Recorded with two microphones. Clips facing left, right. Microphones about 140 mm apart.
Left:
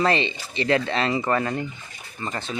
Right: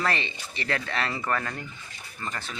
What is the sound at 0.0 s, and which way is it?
Speech, 20° left (ahead or behind).